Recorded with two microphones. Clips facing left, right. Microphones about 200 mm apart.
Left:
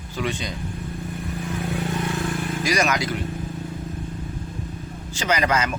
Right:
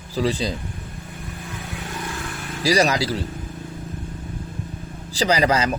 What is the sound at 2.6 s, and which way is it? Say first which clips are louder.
Speech: right 5 dB; 35° right (ahead or behind).